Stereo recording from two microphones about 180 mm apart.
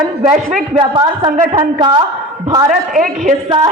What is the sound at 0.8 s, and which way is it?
A woman's voice, 25° right (ahead or behind).